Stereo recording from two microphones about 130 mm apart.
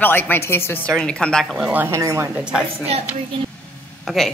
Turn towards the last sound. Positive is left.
turn(degrees=0)  # may be behind; listen again after turning